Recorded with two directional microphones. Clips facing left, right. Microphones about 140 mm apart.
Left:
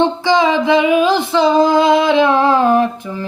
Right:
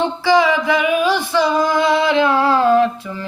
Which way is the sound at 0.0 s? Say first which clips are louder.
Left 2 dB; 20° left (ahead or behind).